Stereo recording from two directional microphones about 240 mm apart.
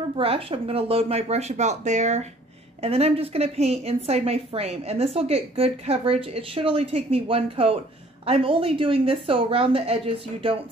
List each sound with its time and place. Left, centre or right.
0.2 s a woman's voice: right